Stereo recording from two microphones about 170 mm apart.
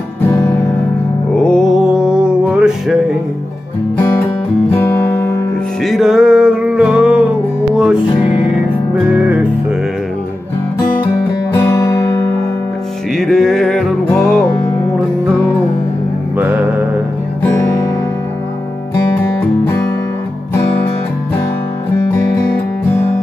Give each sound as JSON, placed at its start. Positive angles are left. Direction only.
{"t": 1.3, "sound": "music", "side_deg": 5}
{"t": 5.9, "sound": "music", "side_deg": 0}
{"t": 9.1, "sound": "music", "side_deg": -10}
{"t": 11.5, "sound": "music", "side_deg": 15}
{"t": 13.1, "sound": "music", "side_deg": 0}
{"t": 16.3, "sound": "music", "side_deg": -10}